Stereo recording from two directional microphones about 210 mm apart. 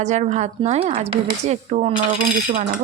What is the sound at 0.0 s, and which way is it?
A woman's voice, 35° right (ahead or behind).